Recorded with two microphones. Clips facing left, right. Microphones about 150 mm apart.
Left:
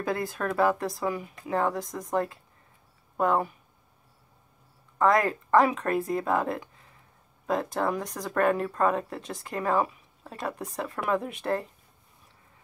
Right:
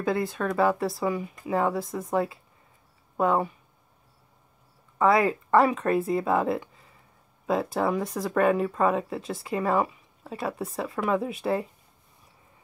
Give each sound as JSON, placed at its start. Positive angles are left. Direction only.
{"t": 0.0, "sound": "speech", "side_deg": 0}
{"t": 4.9, "sound": "speech", "side_deg": -5}